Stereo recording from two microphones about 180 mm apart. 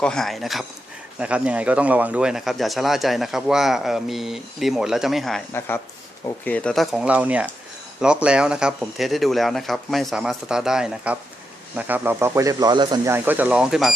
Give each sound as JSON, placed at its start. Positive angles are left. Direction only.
{"t": 0.0, "sound": "speech", "side_deg": 5}
{"t": 5.5, "sound": "speech", "side_deg": 10}
{"t": 13.1, "sound": "speech", "side_deg": -10}